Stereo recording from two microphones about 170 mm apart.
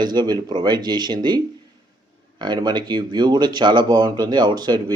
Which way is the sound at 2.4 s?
25° right (ahead or behind).